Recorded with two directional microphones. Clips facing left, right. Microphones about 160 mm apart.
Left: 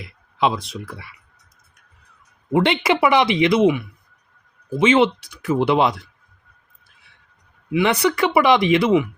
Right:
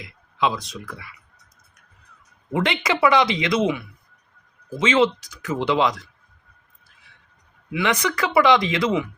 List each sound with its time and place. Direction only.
0.0 s speech: 30° left (ahead or behind)
2.5 s speech: 30° left (ahead or behind)
4.8 s speech: 25° left (ahead or behind)
7.7 s speech: 30° left (ahead or behind)